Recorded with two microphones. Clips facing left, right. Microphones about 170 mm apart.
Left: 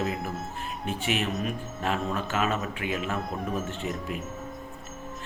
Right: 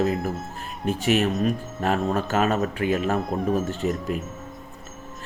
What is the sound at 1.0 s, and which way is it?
A man's voice, 40° right (ahead or behind).